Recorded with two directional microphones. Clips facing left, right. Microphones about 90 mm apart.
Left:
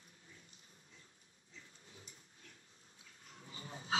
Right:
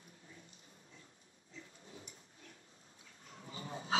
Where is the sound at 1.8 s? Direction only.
30° right (ahead or behind).